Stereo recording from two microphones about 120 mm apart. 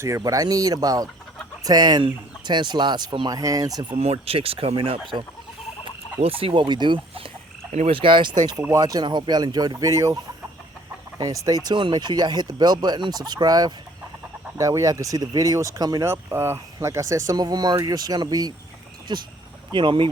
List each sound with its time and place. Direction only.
0.3 s speech: 30° right (ahead or behind)
3.9 s speech: 55° right (ahead or behind)
6.1 s speech: 50° right (ahead or behind)
7.7 s frog: 65° right (ahead or behind)
7.9 s speech: 45° right (ahead or behind); by 10.2 s 25° right (ahead or behind)
11.2 s speech: 30° right (ahead or behind)